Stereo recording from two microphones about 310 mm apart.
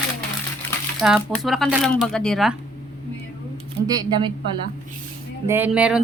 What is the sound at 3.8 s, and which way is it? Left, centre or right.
Speech, centre.